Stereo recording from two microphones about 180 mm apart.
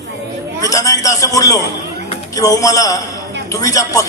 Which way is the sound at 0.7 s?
20° left (ahead or behind).